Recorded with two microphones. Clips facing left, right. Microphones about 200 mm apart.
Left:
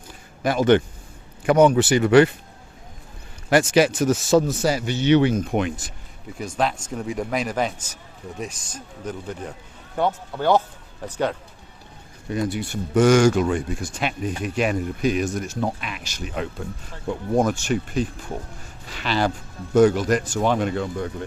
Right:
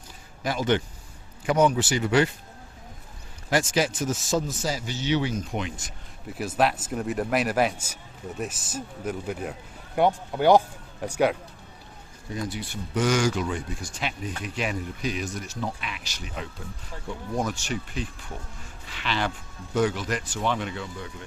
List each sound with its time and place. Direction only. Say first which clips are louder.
0.4 s a man's voice: left 7 dB; 55° left (ahead or behind)
3.5 s a man's voice: left 7 dB; 65° left (ahead or behind)
6.2 s speech: even; 5° right (ahead or behind)
12.3 s speech: left 7 dB; 55° left (ahead or behind)